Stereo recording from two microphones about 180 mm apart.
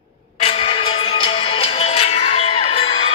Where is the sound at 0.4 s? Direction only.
30° left (ahead or behind).